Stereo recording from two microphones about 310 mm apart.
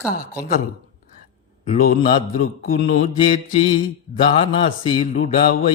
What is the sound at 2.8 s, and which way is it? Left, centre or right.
Speech, left.